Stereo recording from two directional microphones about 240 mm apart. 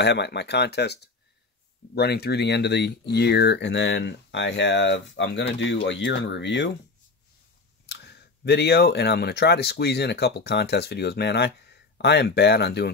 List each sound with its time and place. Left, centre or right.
0.0 s speech: left
7.8 s speech: left